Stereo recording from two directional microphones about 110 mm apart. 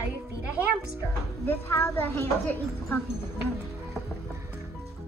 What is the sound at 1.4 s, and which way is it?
A woman's voice, 20° left (ahead or behind).